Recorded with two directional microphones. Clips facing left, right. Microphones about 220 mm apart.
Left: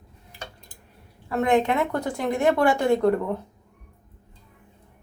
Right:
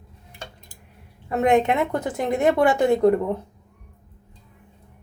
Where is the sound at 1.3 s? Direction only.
20° right (ahead or behind).